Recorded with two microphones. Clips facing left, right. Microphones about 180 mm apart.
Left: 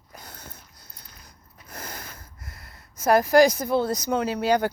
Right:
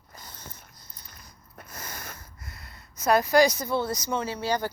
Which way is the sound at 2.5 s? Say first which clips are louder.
Even; 50° left (ahead or behind).